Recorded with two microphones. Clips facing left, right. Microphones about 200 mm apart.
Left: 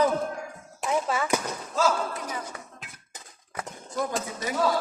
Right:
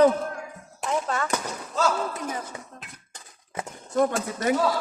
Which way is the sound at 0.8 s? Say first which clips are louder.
Even; 5° left (ahead or behind).